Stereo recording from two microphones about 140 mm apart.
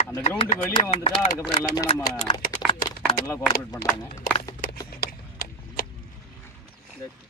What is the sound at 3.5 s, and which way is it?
Speech, 90° left.